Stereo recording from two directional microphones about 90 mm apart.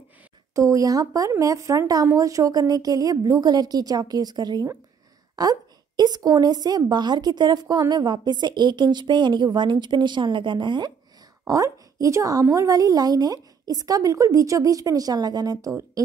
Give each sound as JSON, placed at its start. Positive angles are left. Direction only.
{"t": 0.6, "sound": "a woman's voice", "side_deg": -40}
{"t": 11.4, "sound": "a woman's voice", "side_deg": -40}